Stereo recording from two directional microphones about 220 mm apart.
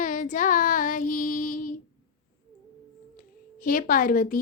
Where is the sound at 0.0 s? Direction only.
35° left (ahead or behind).